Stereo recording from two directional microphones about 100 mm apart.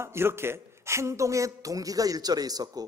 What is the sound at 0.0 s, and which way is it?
A man's voice, 25° right (ahead or behind).